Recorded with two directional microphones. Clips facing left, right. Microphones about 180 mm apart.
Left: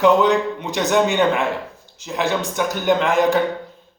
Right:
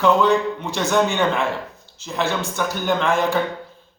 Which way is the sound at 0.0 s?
15° left (ahead or behind).